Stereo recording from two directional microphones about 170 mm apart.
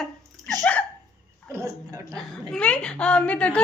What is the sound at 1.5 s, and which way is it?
Speech, 20° right (ahead or behind).